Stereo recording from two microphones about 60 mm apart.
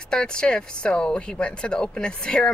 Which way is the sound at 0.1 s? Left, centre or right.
Centre.